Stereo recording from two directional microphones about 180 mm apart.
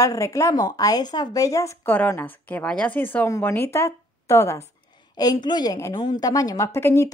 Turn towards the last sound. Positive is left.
turn(degrees=15)  # may be behind; listen again after turning